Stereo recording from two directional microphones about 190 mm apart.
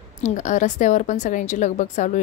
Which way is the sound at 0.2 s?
40° left (ahead or behind).